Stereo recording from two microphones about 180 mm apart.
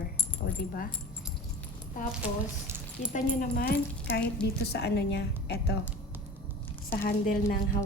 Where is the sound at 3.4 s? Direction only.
55° left (ahead or behind).